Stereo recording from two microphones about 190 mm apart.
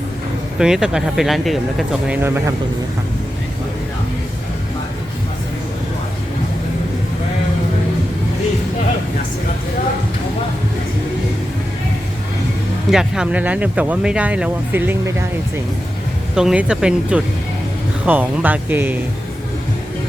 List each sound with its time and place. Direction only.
0.6 s speech: 5° right (ahead or behind)
12.9 s speech: 5° right (ahead or behind)
16.3 s speech: 5° right (ahead or behind)